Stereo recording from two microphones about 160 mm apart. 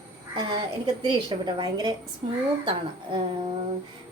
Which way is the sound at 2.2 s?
45° right (ahead or behind).